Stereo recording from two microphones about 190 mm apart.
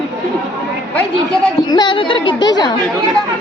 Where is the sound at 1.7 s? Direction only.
25° left (ahead or behind).